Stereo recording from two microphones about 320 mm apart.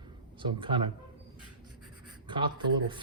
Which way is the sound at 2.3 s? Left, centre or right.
Centre.